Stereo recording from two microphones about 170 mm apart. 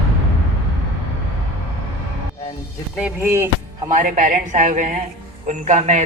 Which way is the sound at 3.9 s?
45° right (ahead or behind).